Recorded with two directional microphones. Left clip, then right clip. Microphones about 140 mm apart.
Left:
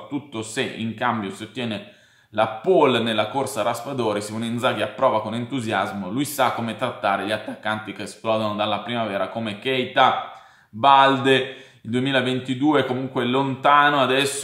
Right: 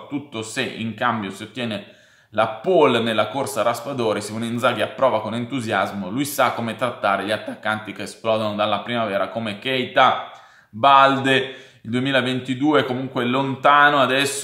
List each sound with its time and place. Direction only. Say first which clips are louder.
0.1 s a man's voice: right 1 dB; 20° right (ahead or behind)